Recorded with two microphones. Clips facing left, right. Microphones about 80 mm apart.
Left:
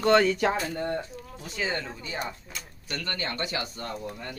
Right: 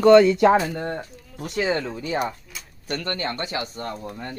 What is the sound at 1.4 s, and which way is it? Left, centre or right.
Speech, right.